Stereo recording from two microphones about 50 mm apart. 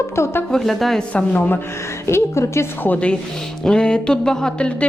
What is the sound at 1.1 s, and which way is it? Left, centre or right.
Speech, left.